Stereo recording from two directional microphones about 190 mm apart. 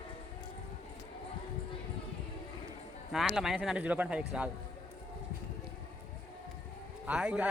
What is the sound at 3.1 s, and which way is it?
Speech, centre (ahead or behind).